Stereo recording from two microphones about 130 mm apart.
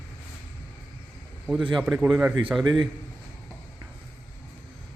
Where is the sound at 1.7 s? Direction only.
5° right (ahead or behind).